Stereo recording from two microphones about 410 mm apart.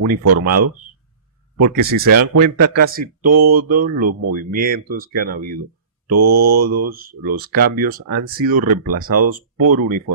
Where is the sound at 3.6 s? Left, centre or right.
Right.